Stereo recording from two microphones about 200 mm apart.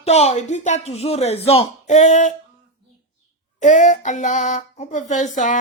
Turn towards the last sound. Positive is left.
turn(degrees=35)  # may be behind; listen again after turning